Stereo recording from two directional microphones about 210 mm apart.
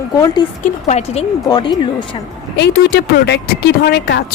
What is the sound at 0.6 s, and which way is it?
Speech, 35° left (ahead or behind).